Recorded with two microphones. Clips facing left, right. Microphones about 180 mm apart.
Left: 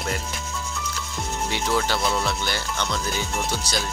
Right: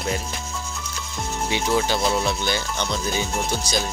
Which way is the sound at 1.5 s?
15° right (ahead or behind).